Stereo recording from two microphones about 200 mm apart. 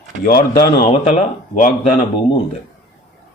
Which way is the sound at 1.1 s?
35° left (ahead or behind).